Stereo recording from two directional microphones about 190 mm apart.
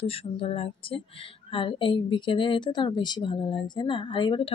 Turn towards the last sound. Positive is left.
turn(degrees=25)  # may be behind; listen again after turning